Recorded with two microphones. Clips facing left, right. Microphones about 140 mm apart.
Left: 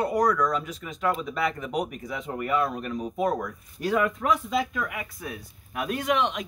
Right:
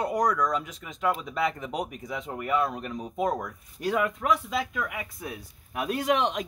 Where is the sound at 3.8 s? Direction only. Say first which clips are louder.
Left 1 dB; 5° right (ahead or behind).